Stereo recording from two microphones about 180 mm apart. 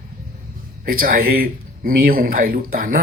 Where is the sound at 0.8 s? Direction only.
50° right (ahead or behind).